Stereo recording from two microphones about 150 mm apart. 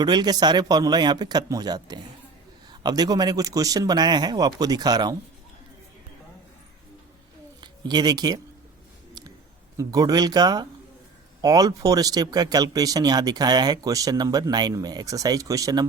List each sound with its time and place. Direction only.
0.0 s speech: 30° right (ahead or behind)
7.6 s speech: 30° right (ahead or behind)
9.7 s speech: 25° right (ahead or behind)